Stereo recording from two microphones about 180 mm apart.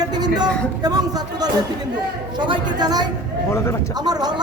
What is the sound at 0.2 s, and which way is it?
A woman's voice, 20° right (ahead or behind).